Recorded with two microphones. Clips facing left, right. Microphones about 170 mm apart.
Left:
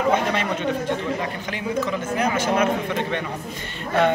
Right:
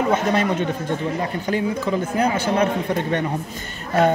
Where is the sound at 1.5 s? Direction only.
35° right (ahead or behind).